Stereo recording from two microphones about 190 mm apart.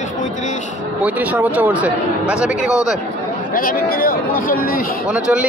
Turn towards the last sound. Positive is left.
turn(degrees=-5)  # may be behind; listen again after turning